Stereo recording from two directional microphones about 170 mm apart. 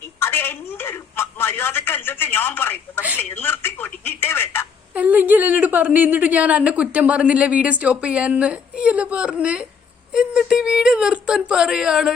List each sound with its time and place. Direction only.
0.2 s telephone: 15° left (ahead or behind)
4.9 s a woman's voice: 10° right (ahead or behind)